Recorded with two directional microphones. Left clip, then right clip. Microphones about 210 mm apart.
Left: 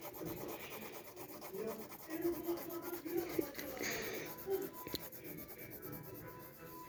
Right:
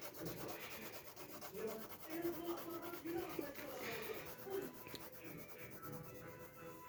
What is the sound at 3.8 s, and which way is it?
Music, 25° left (ahead or behind).